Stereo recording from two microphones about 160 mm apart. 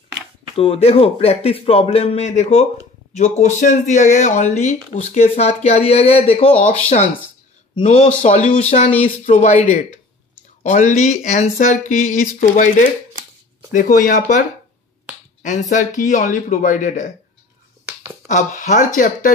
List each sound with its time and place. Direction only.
0.6 s speech: 40° left (ahead or behind)
7.8 s speech: 45° left (ahead or behind)
15.4 s speech: 50° left (ahead or behind)
18.2 s speech: 50° left (ahead or behind)